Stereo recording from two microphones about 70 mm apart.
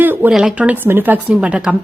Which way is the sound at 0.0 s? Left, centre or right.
Right.